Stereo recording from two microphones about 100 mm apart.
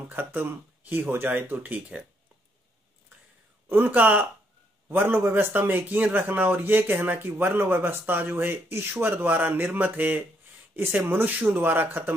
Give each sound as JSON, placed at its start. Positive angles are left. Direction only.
{"t": 0.1, "sound": "a man's voice", "side_deg": -20}
{"t": 3.6, "sound": "a man's voice", "side_deg": -20}